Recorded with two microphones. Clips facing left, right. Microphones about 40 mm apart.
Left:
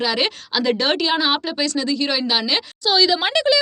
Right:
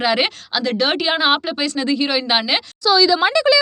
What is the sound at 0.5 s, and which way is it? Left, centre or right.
Speech, centre.